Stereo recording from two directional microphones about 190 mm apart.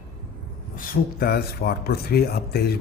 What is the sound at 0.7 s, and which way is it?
Speech, 50° left (ahead or behind).